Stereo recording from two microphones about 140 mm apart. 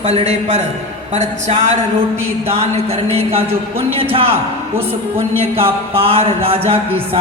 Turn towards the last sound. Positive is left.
turn(degrees=-45)  # may be behind; listen again after turning